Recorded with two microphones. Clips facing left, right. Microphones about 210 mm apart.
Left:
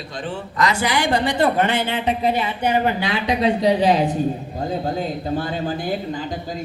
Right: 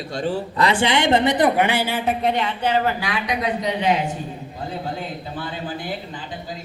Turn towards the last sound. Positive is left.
turn(degrees=45)  # may be behind; listen again after turning